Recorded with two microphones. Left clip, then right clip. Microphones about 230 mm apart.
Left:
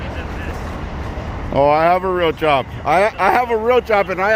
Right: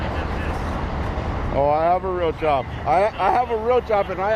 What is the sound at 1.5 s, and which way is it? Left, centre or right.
Speech, left.